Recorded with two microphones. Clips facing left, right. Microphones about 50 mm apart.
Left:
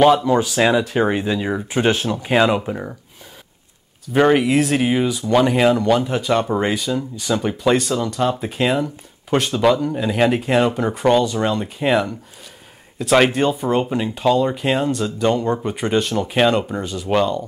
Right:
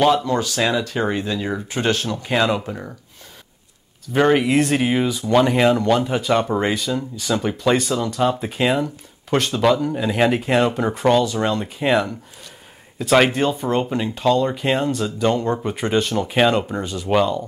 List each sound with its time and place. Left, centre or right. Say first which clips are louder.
0.0 s speech: left 3 dB; centre
4.1 s speech: left 1 dB; centre